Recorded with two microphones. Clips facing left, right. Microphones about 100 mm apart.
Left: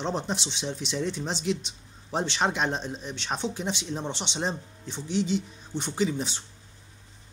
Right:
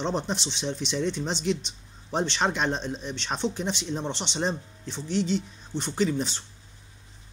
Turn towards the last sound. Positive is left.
turn(degrees=10)  # may be behind; listen again after turning